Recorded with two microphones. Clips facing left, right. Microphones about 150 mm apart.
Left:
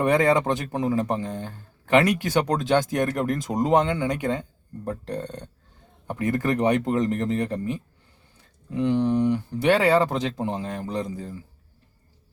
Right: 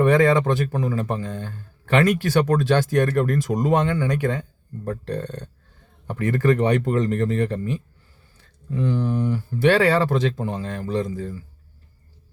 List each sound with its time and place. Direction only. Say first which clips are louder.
0.0 s speech: right 3 dB; 20° left (ahead or behind)